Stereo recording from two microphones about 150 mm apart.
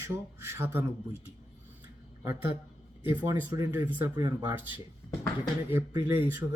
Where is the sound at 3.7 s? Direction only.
15° right (ahead or behind).